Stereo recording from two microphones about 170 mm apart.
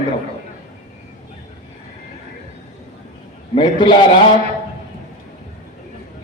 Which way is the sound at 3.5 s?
30° left (ahead or behind).